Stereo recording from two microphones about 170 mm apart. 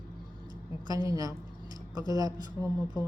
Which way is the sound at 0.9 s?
20° right (ahead or behind).